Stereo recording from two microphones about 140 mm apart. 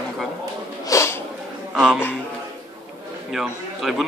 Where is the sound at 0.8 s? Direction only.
20° left (ahead or behind).